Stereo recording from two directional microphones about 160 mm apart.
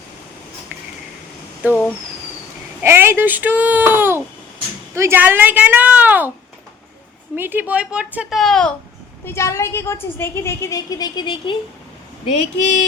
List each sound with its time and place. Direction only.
2.8 s speech: 15° right (ahead or behind)
7.3 s speech: 10° right (ahead or behind)
9.2 s a woman's voice: 15° left (ahead or behind)
12.2 s speech: 45° left (ahead or behind)